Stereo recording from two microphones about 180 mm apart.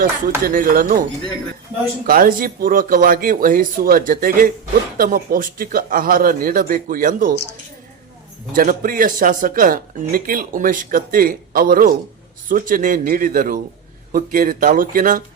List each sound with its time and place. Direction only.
0.0 s speech: 50° right (ahead or behind)
2.0 s speech: 50° right (ahead or behind)
8.5 s speech: 50° right (ahead or behind)